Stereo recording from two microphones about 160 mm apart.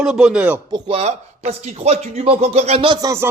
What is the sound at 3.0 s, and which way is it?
Speech, 20° right (ahead or behind).